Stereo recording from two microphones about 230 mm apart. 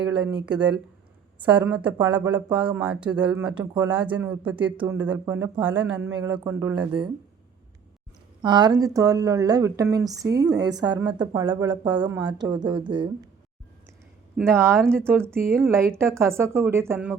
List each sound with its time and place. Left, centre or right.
0.1 s speech: centre
8.4 s speech: centre
12.0 s speech: centre
12.4 s speech: centre
14.3 s speech: centre
14.8 s speech: centre
15.0 s speech: centre